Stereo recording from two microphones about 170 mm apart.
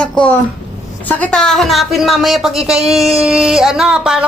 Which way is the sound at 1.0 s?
10° left (ahead or behind).